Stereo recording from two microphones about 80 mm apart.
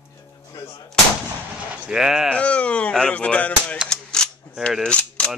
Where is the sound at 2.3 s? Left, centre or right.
Centre.